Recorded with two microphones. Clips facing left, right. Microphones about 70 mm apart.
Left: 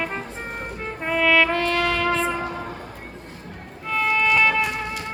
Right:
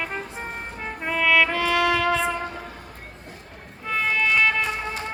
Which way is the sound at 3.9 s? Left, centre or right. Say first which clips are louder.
Left 2 dB; centre.